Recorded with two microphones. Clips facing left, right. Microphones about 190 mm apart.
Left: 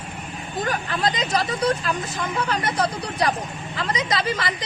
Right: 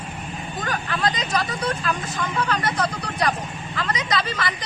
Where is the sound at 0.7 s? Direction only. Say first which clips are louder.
Even; 25° left (ahead or behind).